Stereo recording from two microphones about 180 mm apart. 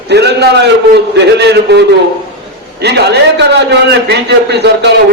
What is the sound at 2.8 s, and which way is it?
A man's voice, 65° right (ahead or behind).